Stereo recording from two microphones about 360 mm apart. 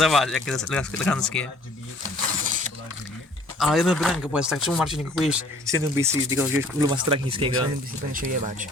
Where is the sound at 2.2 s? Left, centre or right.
Right.